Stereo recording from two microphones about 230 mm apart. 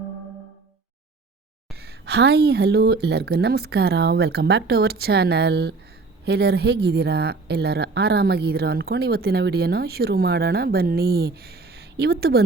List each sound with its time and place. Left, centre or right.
1.7 s a woman's voice: right